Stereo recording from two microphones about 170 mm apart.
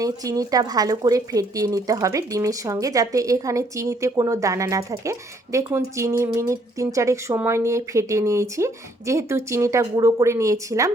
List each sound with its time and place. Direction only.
0.0 s speech: 20° right (ahead or behind)